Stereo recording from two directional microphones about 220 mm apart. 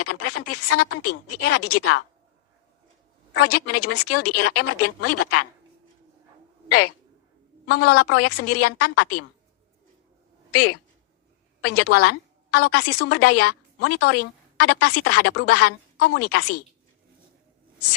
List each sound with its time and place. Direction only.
0.0 s a woman's voice: 90° left
3.4 s a woman's voice: 90° left
6.7 s a woman's voice: 90° left
10.5 s a woman's voice: 90° left